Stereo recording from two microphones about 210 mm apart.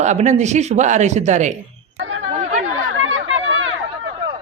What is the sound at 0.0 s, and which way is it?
Speech, 35° right (ahead or behind).